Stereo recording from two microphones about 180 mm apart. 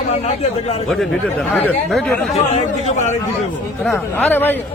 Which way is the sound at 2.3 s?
35° left (ahead or behind).